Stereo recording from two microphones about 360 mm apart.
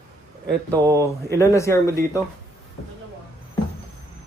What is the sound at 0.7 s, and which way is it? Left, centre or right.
Speech, centre.